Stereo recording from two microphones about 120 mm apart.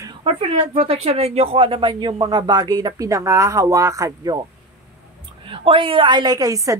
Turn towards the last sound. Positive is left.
turn(degrees=-30)  # may be behind; listen again after turning